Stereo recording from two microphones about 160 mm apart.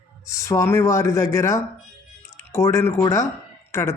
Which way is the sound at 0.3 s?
20° left (ahead or behind).